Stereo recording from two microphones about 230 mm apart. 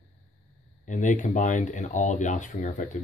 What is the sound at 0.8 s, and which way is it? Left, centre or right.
Speech, left.